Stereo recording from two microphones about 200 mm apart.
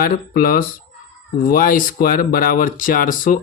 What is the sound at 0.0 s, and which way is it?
Speech, 45° left (ahead or behind).